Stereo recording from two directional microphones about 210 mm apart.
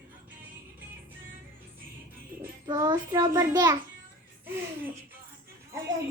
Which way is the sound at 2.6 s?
20° right (ahead or behind).